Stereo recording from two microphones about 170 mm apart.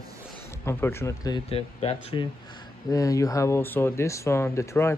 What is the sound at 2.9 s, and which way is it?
Speech, 20° left (ahead or behind).